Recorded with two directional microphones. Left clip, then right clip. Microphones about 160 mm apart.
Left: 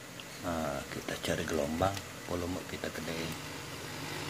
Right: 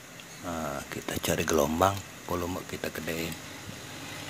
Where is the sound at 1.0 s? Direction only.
30° right (ahead or behind).